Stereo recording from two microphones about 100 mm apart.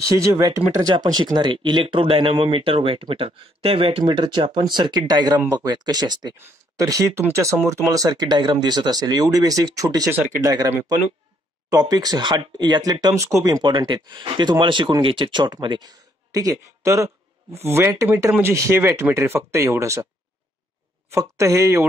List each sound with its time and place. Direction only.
0.0 s speech: 35° right (ahead or behind); by 4.0 s 70° right (ahead or behind)
4.0 s speech: 50° right (ahead or behind)
11.7 s speech: 40° right (ahead or behind)
13.7 s speech: 50° right (ahead or behind); by 20.1 s 30° right (ahead or behind)
21.1 s speech: 30° right (ahead or behind)